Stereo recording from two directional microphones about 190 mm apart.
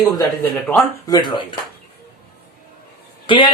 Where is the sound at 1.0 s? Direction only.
20° left (ahead or behind).